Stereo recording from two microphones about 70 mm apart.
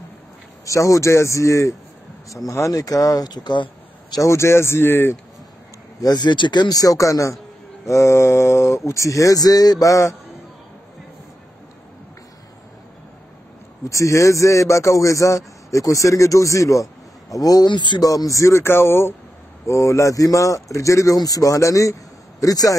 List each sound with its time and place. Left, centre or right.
0.7 s a man's voice: left
4.2 s speech: left
5.9 s a man's voice: left
13.8 s a man's voice: left
18.1 s a man's voice: left